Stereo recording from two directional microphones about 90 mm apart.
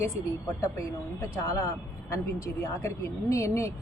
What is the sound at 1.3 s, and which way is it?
Speech, 40° left (ahead or behind).